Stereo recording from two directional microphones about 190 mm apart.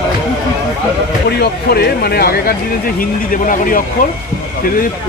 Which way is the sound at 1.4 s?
55° left (ahead or behind).